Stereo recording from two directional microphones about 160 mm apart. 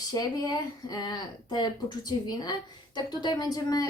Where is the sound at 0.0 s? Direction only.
25° left (ahead or behind).